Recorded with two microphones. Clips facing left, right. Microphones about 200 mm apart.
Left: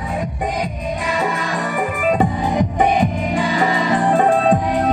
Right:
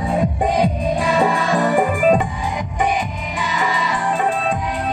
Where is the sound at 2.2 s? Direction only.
50° left (ahead or behind).